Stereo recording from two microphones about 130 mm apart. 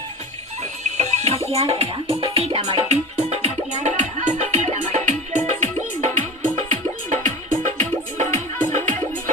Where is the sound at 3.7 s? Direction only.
65° right (ahead or behind).